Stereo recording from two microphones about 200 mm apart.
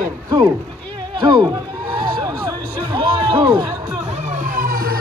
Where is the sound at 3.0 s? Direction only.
20° right (ahead or behind).